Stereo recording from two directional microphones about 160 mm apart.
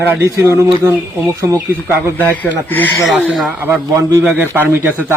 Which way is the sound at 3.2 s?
Centre (ahead or behind).